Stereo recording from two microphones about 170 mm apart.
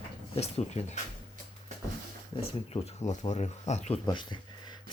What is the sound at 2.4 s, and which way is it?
Speech, 40° left (ahead or behind).